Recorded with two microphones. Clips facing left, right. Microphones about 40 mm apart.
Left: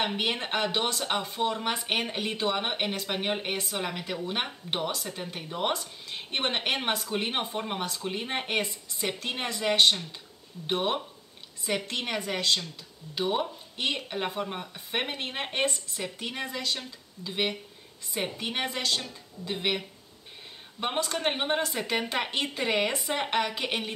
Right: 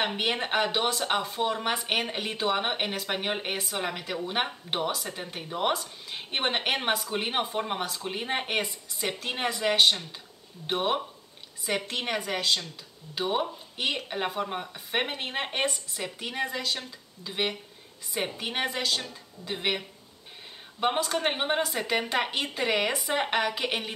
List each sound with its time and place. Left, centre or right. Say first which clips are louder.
0.0 s speech: right 1 dB; centre